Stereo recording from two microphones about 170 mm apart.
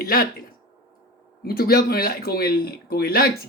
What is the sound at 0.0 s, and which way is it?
Speech, 60° left (ahead or behind).